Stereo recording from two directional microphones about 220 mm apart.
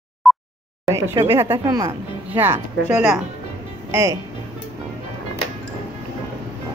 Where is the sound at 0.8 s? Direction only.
15° right (ahead or behind).